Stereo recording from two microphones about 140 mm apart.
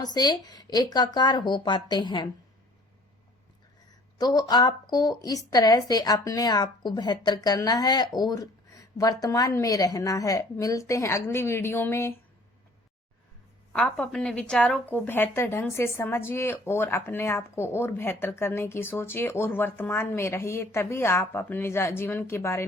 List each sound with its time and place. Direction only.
0.0 s speech: 30° left (ahead or behind)
4.2 s speech: 30° left (ahead or behind)
13.7 s a woman's voice: 5° left (ahead or behind)